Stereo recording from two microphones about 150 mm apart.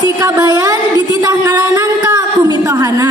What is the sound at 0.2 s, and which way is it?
Speech, 20° right (ahead or behind).